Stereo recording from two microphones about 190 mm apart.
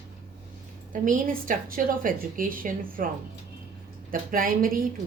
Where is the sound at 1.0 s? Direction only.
45° right (ahead or behind).